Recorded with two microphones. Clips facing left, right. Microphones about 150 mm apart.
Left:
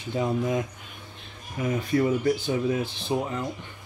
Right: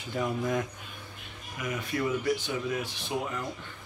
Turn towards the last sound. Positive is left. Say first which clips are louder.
# left 5 dB
turn(degrees=30)  # may be behind; listen again after turning